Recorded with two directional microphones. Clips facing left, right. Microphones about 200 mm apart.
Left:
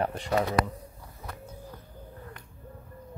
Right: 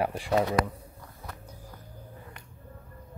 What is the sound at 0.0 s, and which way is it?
Speech, 10° right (ahead or behind).